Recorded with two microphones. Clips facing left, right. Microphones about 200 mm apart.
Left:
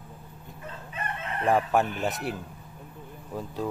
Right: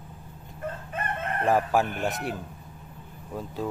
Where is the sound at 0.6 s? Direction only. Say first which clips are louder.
Right 4 dB; 50° right (ahead or behind).